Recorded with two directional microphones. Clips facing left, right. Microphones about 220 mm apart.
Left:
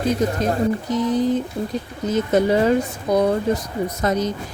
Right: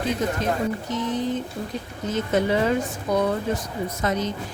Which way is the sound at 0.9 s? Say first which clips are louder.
Left 6 dB; 35° left (ahead or behind).